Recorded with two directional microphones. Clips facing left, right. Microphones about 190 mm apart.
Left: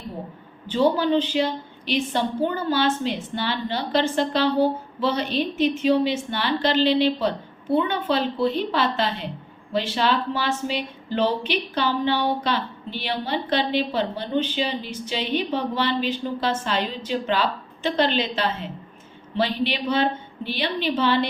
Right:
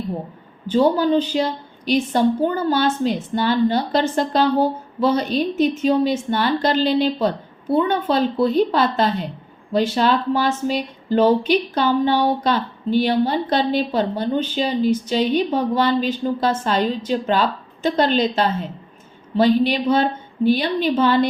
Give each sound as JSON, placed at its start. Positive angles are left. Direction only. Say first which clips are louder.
{"t": 0.7, "sound": "a woman's voice", "louder": "right 3 dB", "side_deg": -40}